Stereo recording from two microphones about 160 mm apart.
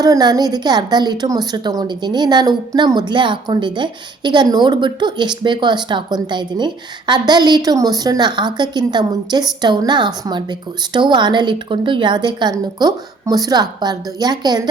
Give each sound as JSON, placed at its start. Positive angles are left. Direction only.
{"t": 0.0, "sound": "a woman's voice", "side_deg": -25}